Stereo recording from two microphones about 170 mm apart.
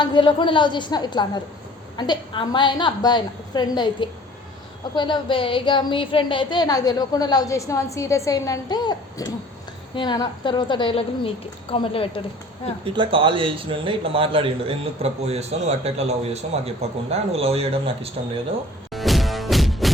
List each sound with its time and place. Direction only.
0.0 s a woman's voice: 25° left (ahead or behind)
12.8 s a man's voice: 30° right (ahead or behind)
18.9 s music: centre (ahead or behind)